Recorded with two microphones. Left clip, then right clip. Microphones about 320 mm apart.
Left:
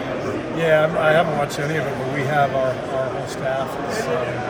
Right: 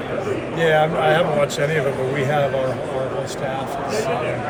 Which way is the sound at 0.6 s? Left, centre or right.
Centre.